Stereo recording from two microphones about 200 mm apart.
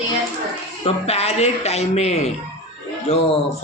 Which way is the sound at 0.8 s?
30° left (ahead or behind).